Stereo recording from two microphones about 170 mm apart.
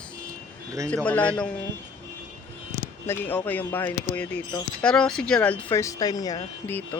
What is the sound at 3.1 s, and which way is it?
Speech, 10° left (ahead or behind).